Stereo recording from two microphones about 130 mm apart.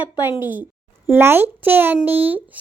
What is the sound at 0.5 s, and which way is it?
A child's voice, 15° right (ahead or behind).